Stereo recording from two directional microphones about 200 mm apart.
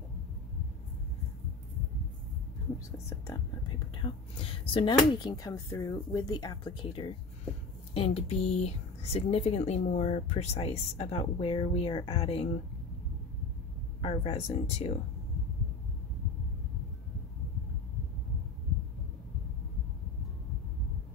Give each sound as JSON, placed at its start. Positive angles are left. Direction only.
{"t": 3.9, "sound": "speech", "side_deg": 25}
{"t": 14.0, "sound": "speech", "side_deg": 30}